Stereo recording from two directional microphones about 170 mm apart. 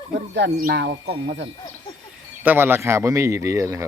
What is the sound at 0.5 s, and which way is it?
Speech, 65° right (ahead or behind).